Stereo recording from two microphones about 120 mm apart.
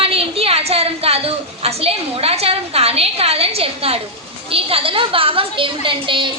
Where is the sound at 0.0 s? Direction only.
55° right (ahead or behind).